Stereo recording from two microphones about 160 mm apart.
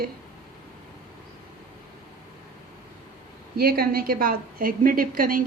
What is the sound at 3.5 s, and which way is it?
A woman's voice, 70° right (ahead or behind).